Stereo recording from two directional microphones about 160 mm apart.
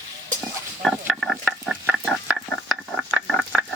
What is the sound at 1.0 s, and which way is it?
Stir, centre (ahead or behind).